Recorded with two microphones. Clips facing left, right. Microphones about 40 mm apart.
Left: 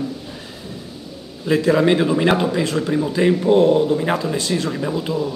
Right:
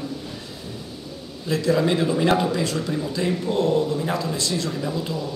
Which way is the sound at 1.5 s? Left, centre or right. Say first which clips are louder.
Left 5 dB; left.